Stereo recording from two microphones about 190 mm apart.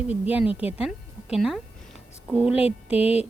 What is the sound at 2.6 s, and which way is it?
Speech, 30° left (ahead or behind).